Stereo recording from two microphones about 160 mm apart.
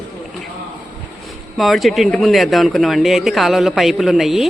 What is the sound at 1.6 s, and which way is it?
Speech, centre (ahead or behind).